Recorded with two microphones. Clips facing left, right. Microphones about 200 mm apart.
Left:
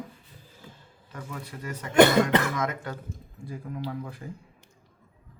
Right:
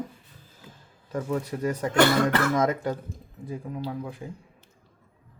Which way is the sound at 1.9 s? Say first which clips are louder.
Left 3 dB; 20° left (ahead or behind).